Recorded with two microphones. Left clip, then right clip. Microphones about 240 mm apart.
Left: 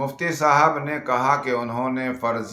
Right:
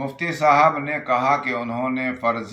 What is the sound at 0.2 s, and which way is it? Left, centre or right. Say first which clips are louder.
Speech: right 2 dB; centre.